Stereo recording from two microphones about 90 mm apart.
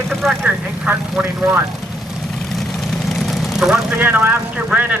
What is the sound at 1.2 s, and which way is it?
Speech, 30° right (ahead or behind).